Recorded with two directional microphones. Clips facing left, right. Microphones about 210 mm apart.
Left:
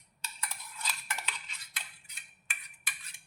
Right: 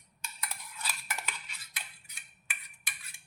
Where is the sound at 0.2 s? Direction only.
10° right (ahead or behind).